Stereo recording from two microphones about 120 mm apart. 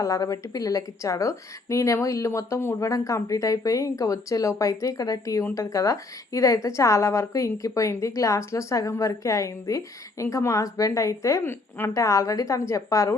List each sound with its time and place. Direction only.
0.0 s a woman's voice: 25° left (ahead or behind)